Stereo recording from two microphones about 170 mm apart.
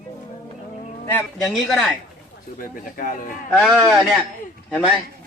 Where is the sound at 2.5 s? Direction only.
55° left (ahead or behind).